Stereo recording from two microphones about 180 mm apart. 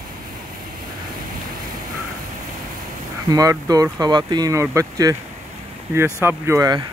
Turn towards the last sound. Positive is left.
turn(degrees=-15)  # may be behind; listen again after turning